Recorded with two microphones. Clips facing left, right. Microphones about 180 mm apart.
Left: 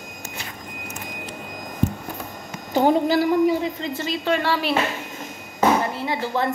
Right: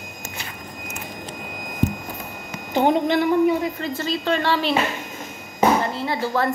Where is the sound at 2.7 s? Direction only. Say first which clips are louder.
Left 1 dB; 40° left (ahead or behind).